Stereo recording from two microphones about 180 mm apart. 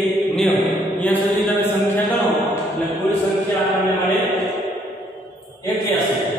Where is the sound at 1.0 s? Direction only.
10° left (ahead or behind).